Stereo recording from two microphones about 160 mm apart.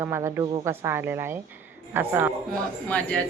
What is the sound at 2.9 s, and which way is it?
Speech, 10° left (ahead or behind).